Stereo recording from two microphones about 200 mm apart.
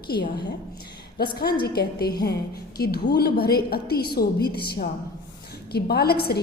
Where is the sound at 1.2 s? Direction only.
50° left (ahead or behind).